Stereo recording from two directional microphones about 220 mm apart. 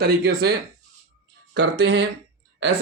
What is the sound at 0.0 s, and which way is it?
Speech, 45° right (ahead or behind).